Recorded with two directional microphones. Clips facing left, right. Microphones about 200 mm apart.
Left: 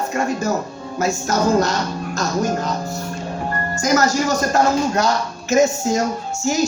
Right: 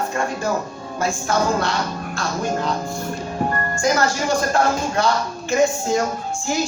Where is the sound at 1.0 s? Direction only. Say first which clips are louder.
Left 1 dB; 40° left (ahead or behind).